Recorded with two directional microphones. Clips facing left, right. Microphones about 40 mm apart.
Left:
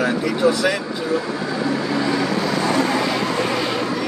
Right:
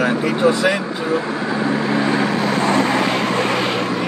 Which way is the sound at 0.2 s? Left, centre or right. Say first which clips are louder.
Right 2 dB; right.